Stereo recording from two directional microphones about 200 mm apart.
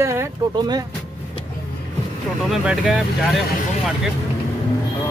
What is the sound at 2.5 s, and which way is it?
Speech, 5° right (ahead or behind).